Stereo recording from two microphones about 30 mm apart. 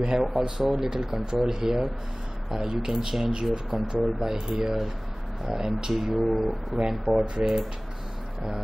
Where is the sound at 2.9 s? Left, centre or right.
Centre.